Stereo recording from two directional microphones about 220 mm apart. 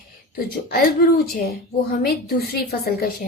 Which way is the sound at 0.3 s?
45° left (ahead or behind).